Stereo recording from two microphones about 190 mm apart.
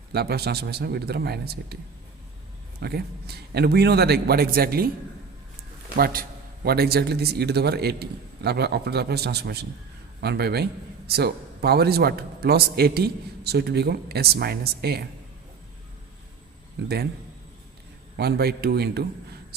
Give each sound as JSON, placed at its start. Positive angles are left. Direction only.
{"t": 0.1, "sound": "a man's voice", "side_deg": -55}
{"t": 2.8, "sound": "a man's voice", "side_deg": -55}
{"t": 6.7, "sound": "a man's voice", "side_deg": -55}
{"t": 18.2, "sound": "a man's voice", "side_deg": -55}